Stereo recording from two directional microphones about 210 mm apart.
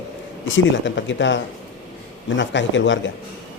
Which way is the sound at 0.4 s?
65° left (ahead or behind).